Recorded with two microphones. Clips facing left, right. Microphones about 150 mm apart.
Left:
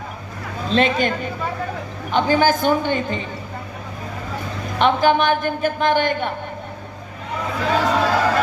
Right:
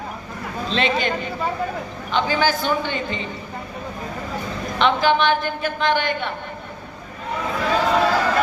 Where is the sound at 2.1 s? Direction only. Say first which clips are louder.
Left 4 dB; 50° left (ahead or behind).